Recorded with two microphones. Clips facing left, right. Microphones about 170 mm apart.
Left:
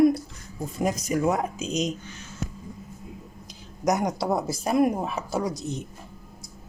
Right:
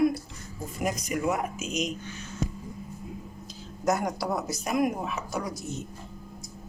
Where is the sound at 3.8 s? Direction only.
20° left (ahead or behind).